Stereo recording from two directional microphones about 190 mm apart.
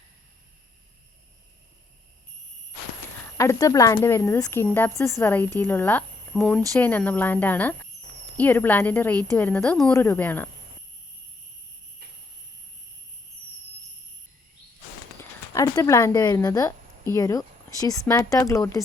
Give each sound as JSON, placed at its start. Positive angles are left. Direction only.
{"t": 3.3, "sound": "speech", "side_deg": 15}
{"t": 15.2, "sound": "speech", "side_deg": 20}